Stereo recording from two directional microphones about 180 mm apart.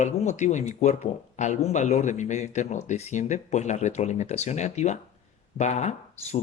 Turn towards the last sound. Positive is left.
turn(degrees=40)  # may be behind; listen again after turning